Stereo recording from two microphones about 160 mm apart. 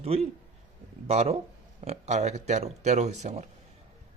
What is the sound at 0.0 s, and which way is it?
A man's voice, 40° right (ahead or behind).